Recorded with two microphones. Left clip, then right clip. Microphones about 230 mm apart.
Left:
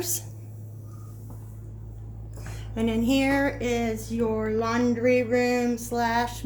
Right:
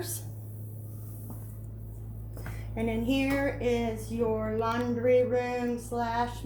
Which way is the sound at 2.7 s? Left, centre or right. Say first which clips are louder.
Left 5 dB; left.